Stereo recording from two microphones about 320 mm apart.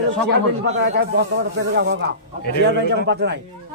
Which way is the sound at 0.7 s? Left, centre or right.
Right.